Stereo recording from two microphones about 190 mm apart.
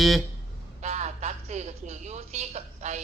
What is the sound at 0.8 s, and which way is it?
Speech, 35° right (ahead or behind).